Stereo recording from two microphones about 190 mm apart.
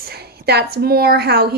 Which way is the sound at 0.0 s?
55° right (ahead or behind).